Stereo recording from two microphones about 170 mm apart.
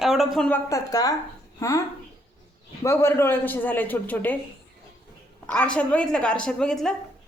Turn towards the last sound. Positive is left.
turn(degrees=5)  # may be behind; listen again after turning